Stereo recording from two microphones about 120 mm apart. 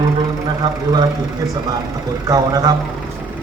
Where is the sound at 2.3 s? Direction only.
30° right (ahead or behind).